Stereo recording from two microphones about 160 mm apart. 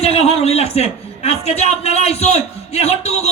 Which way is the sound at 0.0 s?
40° left (ahead or behind).